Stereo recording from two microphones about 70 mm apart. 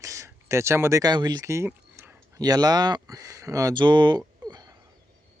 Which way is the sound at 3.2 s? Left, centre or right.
Right.